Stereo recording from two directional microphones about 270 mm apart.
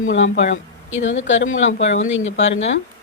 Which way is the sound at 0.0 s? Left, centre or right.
Left.